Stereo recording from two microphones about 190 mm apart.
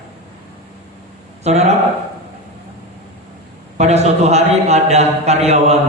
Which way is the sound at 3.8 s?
35° right (ahead or behind).